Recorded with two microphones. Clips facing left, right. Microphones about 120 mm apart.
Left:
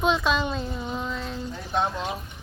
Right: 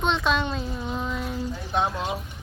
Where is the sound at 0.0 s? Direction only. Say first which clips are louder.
Left 1 dB; 5° left (ahead or behind).